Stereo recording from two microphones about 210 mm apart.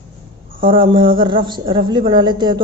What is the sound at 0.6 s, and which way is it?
A woman's voice, 25° right (ahead or behind).